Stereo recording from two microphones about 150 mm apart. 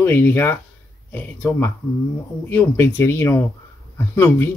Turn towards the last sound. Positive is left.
turn(degrees=15)  # may be behind; listen again after turning